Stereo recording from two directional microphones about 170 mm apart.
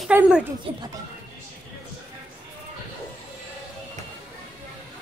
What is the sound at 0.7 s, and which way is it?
Speech, 30° right (ahead or behind).